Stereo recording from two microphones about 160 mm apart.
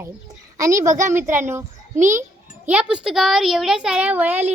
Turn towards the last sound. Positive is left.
turn(degrees=-10)  # may be behind; listen again after turning